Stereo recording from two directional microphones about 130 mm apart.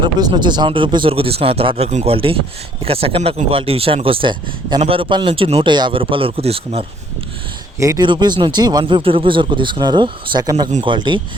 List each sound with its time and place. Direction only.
0.0 s speech: 35° right (ahead or behind); by 6.8 s 50° right (ahead or behind)
7.8 s speech: 25° right (ahead or behind)
8.0 s speech: 35° right (ahead or behind)